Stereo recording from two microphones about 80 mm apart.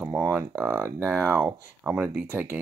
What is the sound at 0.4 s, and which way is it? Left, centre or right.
Speech, right.